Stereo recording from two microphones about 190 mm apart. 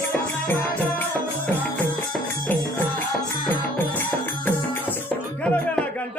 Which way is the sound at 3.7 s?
10° left (ahead or behind).